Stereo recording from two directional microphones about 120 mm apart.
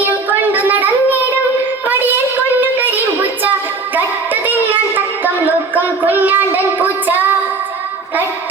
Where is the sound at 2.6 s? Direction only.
15° right (ahead or behind).